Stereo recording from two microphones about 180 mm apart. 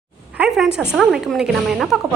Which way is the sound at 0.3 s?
5° right (ahead or behind).